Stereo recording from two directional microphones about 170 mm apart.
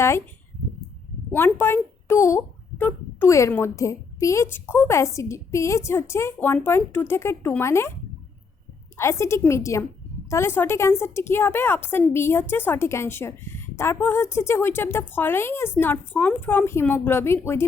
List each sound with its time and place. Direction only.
1.3 s a woman's voice: 10° left (ahead or behind)
9.0 s a woman's voice: 15° left (ahead or behind)